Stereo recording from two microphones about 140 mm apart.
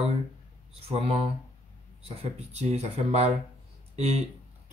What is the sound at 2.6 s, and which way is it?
Speech, 50° right (ahead or behind).